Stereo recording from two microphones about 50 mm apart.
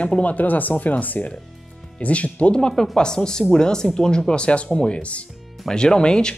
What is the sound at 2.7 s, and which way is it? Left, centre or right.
Speech, centre.